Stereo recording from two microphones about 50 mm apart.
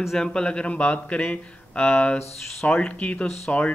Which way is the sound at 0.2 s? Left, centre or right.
Centre.